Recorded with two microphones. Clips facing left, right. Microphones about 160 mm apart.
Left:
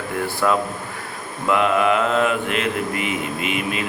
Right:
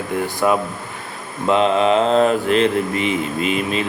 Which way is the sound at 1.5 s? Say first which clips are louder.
Right 3 dB; 25° right (ahead or behind).